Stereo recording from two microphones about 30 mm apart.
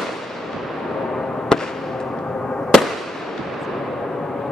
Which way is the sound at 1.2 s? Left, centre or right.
Centre.